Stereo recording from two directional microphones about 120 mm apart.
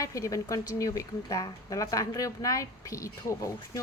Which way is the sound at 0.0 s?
25° left (ahead or behind).